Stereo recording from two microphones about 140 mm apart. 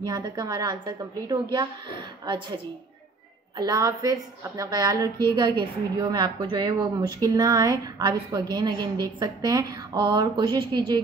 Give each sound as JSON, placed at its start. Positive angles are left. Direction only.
{"t": 0.0, "sound": "a woman's voice", "side_deg": -30}
{"t": 3.5, "sound": "a woman's voice", "side_deg": -30}